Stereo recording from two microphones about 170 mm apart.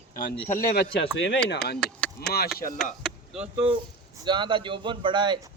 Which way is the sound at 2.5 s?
55° left (ahead or behind).